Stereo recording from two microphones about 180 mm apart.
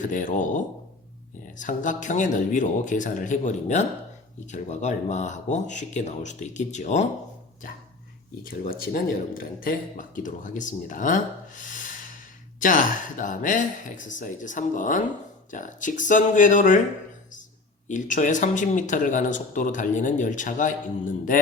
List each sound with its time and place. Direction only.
0.0 s speech: 45° left (ahead or behind)
8.4 s speech: 55° left (ahead or behind)
12.5 s speech: 45° left (ahead or behind)
17.8 s speech: 45° left (ahead or behind)